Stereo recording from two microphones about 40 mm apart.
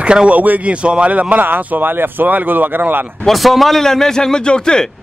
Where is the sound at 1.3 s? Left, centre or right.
Right.